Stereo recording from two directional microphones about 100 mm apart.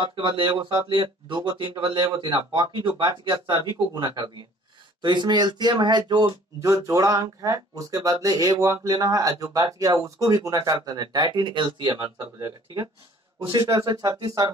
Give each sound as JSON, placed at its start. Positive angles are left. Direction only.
{"t": 0.0, "sound": "speech", "side_deg": -55}
{"t": 6.6, "sound": "speech", "side_deg": -30}
{"t": 12.2, "sound": "speech", "side_deg": -35}